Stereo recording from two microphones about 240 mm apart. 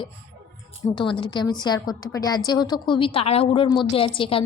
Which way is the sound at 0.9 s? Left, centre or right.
Centre.